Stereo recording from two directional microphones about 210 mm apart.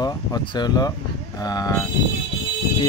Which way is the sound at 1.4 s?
15° left (ahead or behind).